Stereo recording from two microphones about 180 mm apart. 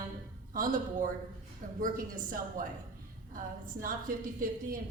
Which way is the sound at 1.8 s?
50° right (ahead or behind).